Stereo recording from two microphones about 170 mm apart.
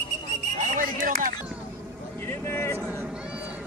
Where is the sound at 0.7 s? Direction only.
55° right (ahead or behind).